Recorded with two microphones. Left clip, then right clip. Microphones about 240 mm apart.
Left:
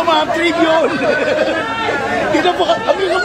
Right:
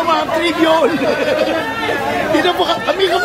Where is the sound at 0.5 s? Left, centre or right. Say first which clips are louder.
Right 2 dB; centre.